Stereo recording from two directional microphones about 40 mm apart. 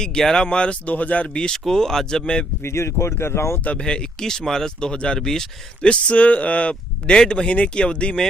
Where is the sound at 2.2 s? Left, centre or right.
Left.